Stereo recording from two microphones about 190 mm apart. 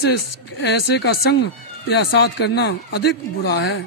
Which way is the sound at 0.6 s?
60° left (ahead or behind).